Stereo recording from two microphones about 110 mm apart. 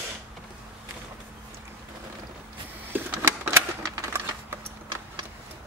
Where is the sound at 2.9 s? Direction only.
20° right (ahead or behind).